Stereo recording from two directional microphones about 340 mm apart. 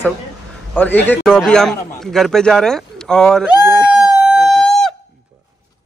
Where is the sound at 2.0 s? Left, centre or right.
Centre.